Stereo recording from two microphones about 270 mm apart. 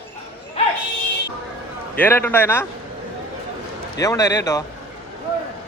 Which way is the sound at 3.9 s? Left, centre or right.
Centre.